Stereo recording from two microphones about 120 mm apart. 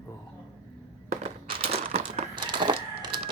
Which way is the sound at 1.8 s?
65° right (ahead or behind).